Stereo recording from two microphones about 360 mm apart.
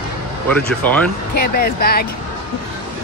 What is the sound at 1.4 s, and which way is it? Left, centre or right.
Speech, left.